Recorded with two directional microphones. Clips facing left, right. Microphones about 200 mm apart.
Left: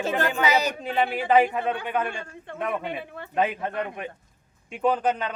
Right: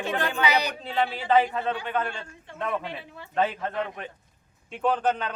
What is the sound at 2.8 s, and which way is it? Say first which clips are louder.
Speech: left 5 dB; 55° left (ahead or behind).